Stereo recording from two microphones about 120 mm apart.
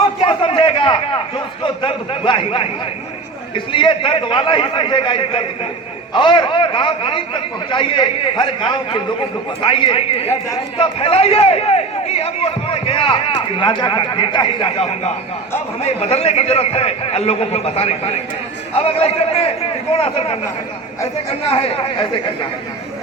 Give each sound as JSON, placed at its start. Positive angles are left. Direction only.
{"t": 0.2, "sound": "a sound", "side_deg": 45}
{"t": 1.6, "sound": "a man's voice", "side_deg": 45}
{"t": 21.5, "sound": "a man's voice", "side_deg": 55}
{"t": 21.9, "sound": "a man's voice", "side_deg": 45}